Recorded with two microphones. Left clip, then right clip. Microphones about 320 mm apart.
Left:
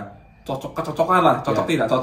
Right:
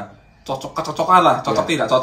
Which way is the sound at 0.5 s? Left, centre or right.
Centre.